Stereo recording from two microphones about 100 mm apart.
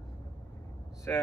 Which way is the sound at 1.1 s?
15° left (ahead or behind).